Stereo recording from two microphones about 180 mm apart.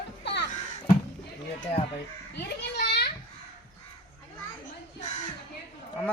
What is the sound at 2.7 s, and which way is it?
Children playing, 65° left (ahead or behind).